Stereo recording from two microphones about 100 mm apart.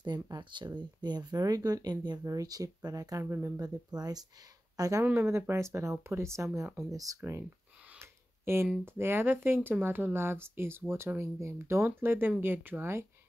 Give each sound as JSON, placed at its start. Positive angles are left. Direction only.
{"t": 0.0, "sound": "speech", "side_deg": -50}
{"t": 3.5, "sound": "speech", "side_deg": -40}
{"t": 8.0, "sound": "a sound", "side_deg": -25}
{"t": 8.8, "sound": "speech", "side_deg": -25}